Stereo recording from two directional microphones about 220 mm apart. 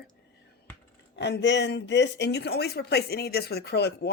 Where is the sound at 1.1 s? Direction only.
50° left (ahead or behind).